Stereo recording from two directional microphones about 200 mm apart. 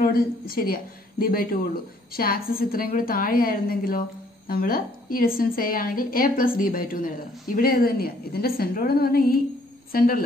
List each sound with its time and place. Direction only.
0.0 s a woman's voice: 45° left (ahead or behind)